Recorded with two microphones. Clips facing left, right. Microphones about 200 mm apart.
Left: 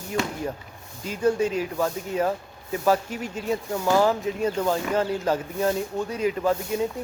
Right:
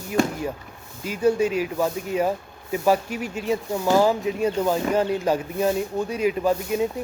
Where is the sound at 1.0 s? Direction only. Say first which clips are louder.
Right 2 dB; 10° right (ahead or behind).